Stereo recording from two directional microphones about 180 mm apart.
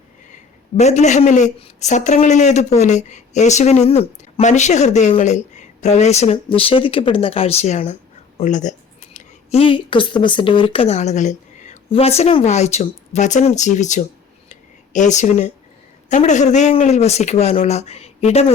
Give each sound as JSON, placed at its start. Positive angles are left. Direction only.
{"t": 0.8, "sound": "speech", "side_deg": 40}
{"t": 14.5, "sound": "a sound", "side_deg": 40}
{"t": 16.0, "sound": "speech", "side_deg": 40}